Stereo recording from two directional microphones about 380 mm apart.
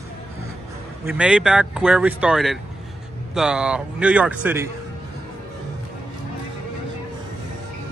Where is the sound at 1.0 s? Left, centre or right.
Centre.